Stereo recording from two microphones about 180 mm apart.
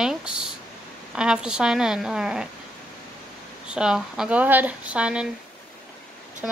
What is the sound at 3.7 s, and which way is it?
Speech, 5° right (ahead or behind).